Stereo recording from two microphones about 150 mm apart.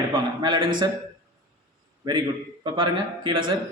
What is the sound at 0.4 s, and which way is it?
Speech, 30° right (ahead or behind).